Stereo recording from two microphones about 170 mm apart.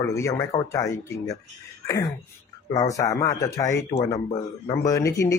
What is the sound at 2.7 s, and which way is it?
Speech, 20° left (ahead or behind).